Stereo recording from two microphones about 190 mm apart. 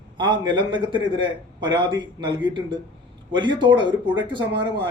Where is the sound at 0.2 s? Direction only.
25° right (ahead or behind).